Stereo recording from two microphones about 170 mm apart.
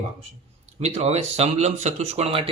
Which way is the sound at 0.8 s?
40° right (ahead or behind).